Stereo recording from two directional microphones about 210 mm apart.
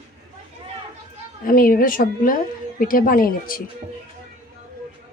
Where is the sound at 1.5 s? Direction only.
40° left (ahead or behind).